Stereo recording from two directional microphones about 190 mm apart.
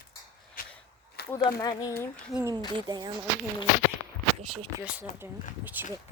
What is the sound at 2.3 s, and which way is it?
Speech, 15° right (ahead or behind).